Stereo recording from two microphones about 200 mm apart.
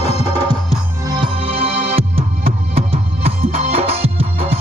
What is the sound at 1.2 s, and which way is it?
Music, 30° right (ahead or behind).